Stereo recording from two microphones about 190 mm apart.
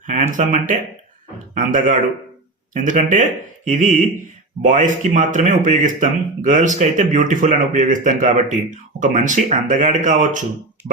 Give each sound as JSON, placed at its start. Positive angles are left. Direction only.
{"t": 0.1, "sound": "speech", "side_deg": -40}